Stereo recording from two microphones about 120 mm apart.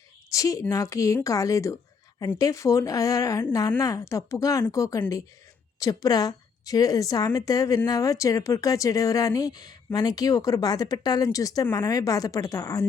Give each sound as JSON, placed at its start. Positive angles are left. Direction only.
{"t": 0.3, "sound": "a woman's voice", "side_deg": 30}